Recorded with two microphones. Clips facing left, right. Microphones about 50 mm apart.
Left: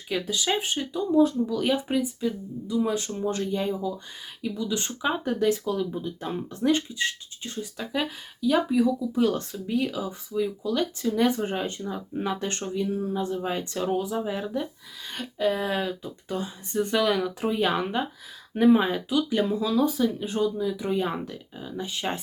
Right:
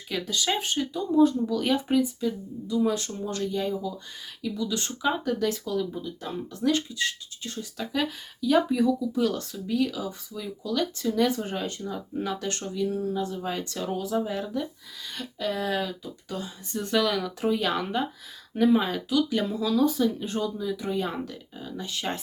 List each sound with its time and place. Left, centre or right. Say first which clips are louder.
0.1 s speech: left 1 dB; centre
1.1 s speech: even; centre
9.1 s speech: left 2 dB; left
11.3 s speech: left 2 dB; left
15.0 s a sound: left 2 dB; left
15.4 s speech: left 3 dB; centre